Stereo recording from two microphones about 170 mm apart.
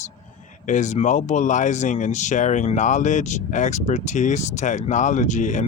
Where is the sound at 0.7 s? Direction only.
45° left (ahead or behind).